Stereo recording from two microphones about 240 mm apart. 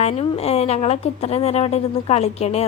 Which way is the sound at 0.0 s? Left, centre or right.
Left.